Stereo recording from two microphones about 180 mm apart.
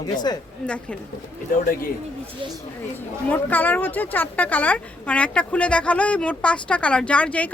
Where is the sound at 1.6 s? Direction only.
50° left (ahead or behind).